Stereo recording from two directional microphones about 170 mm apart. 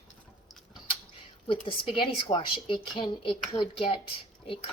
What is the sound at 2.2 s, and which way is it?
A woman's voice, 30° left (ahead or behind).